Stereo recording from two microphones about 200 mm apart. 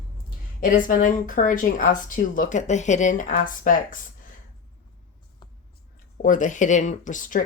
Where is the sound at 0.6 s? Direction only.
45° left (ahead or behind).